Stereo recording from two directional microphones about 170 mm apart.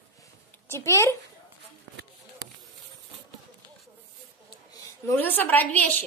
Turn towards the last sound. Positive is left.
turn(degrees=10)  # may be behind; listen again after turning